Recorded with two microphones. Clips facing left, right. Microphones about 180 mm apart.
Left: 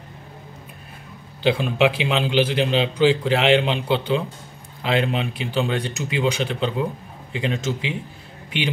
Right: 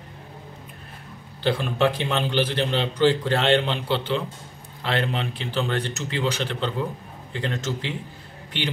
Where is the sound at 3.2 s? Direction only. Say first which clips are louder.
Left 3 dB; 90° left.